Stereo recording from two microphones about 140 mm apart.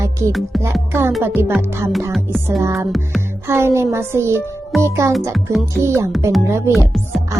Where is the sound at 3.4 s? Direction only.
20° right (ahead or behind).